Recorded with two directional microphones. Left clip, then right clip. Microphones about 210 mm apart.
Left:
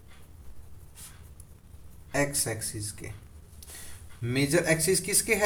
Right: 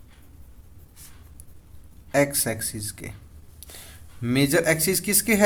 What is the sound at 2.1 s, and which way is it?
Speech, 50° right (ahead or behind).